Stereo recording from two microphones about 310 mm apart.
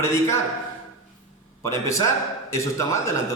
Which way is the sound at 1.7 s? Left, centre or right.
Centre.